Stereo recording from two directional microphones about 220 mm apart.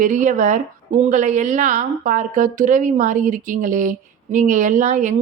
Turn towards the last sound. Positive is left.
turn(degrees=-35)  # may be behind; listen again after turning